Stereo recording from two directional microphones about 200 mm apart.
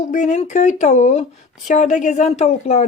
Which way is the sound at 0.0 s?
40° left (ahead or behind).